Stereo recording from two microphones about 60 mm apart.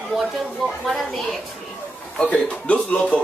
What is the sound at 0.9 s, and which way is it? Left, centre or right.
Speech, centre.